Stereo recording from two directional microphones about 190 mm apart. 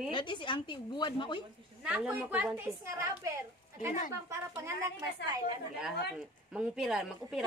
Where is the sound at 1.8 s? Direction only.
5° right (ahead or behind).